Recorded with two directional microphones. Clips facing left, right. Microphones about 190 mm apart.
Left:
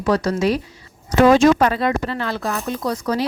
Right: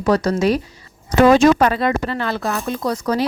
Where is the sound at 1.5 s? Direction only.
60° right (ahead or behind).